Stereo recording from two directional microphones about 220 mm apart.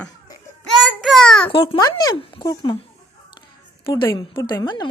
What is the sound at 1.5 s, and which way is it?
Speech, 20° left (ahead or behind).